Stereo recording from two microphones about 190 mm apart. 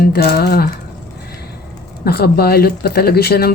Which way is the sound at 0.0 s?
55° left (ahead or behind).